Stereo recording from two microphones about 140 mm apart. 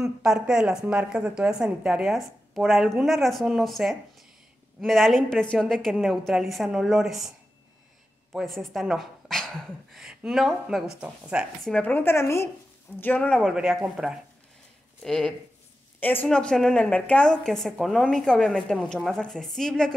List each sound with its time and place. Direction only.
0.0 s a woman's voice: 5° right (ahead or behind)
11.6 s speech: 10° left (ahead or behind)
13.4 s a woman's voice: 5° right (ahead or behind)